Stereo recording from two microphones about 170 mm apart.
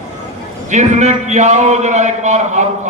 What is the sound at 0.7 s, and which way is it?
A man's voice, 45° right (ahead or behind).